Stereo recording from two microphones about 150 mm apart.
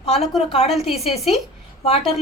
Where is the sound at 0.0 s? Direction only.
45° left (ahead or behind).